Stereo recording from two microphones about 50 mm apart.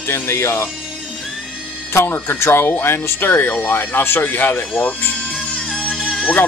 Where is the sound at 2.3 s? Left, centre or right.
Left.